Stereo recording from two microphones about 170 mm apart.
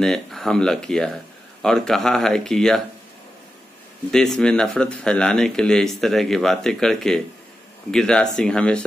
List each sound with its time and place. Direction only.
0.0 s speech: centre (ahead or behind)
4.1 s speech: 5° left (ahead or behind)